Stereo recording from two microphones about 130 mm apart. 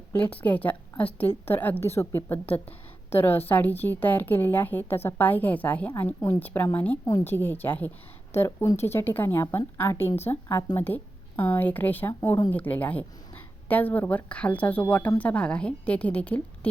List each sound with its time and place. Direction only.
0.4 s a woman's voice: 10° left (ahead or behind)